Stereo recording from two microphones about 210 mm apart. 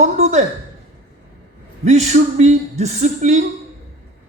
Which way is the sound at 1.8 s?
35° right (ahead or behind).